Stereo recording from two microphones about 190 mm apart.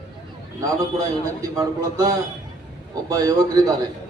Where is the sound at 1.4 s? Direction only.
20° right (ahead or behind).